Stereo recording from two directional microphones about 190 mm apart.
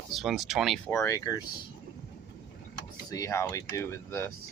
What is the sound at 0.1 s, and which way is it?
Speech, centre (ahead or behind).